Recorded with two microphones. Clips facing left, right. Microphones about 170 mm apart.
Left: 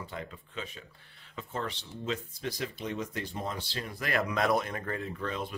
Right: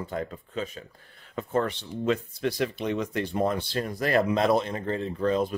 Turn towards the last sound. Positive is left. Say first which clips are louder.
# right 10 dB
turn(degrees=-35)  # may be behind; listen again after turning